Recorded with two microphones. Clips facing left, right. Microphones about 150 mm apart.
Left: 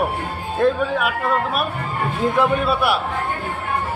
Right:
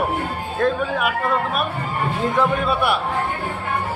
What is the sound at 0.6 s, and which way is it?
Speech, centre (ahead or behind).